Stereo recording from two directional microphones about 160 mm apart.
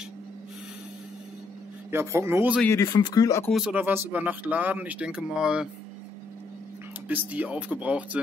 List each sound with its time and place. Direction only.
1.9 s speech: 15° right (ahead or behind)
2.8 s speech: 25° left (ahead or behind)
3.5 s speech: 10° right (ahead or behind)
7.1 s speech: 10° right (ahead or behind)